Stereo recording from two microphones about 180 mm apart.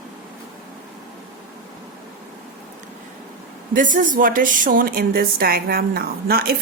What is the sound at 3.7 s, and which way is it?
A woman's voice, 45° right (ahead or behind).